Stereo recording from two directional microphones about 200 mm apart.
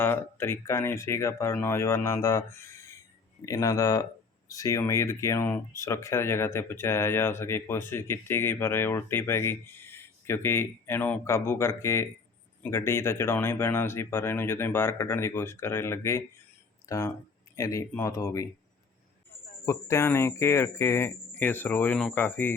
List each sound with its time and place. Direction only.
0.0 s speech: 10° left (ahead or behind)
3.4 s speech: 15° left (ahead or behind)
19.6 s speech: 15° left (ahead or behind)